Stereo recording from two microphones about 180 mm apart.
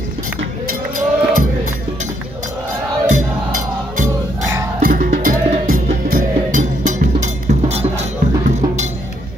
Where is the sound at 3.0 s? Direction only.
45° right (ahead or behind).